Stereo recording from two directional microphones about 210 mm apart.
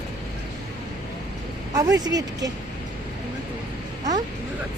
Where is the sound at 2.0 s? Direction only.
20° right (ahead or behind).